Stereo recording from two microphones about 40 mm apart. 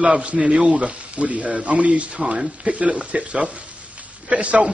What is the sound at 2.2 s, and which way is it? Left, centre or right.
Speech, centre.